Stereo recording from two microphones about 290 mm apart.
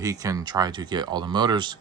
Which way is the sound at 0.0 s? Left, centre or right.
Centre.